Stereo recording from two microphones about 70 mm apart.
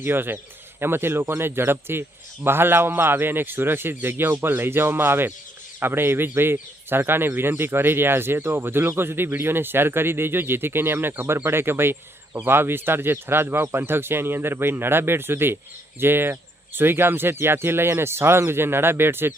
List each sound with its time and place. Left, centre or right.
0.0 s a man's voice: right